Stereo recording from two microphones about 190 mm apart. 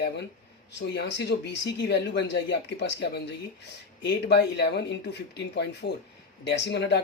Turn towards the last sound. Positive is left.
turn(degrees=65)  # may be behind; listen again after turning